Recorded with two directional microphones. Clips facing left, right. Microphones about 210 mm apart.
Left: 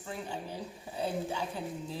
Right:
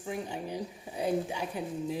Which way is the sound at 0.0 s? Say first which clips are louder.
Right 3 dB; 15° right (ahead or behind).